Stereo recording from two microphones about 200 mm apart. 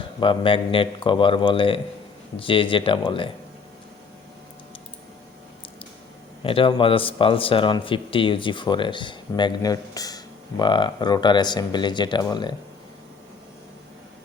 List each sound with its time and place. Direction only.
0.2 s speech: 25° left (ahead or behind)
6.4 s speech: 25° left (ahead or behind)